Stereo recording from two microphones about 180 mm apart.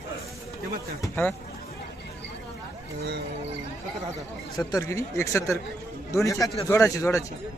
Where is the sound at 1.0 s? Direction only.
10° left (ahead or behind).